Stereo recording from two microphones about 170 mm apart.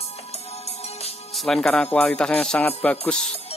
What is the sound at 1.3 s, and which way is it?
Speech, centre (ahead or behind).